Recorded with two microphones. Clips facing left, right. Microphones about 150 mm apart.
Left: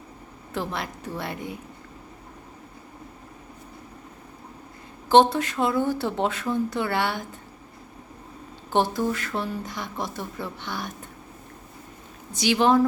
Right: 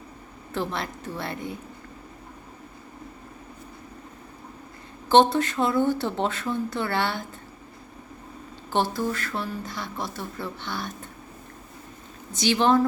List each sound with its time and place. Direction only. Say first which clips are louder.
0.5 s speech: right 1 dB; 10° left (ahead or behind)
5.0 s speech: left 1 dB; 10° left (ahead or behind)
8.7 s speech: left 2 dB; 15° left (ahead or behind)
12.3 s speech: left 1 dB; 10° left (ahead or behind)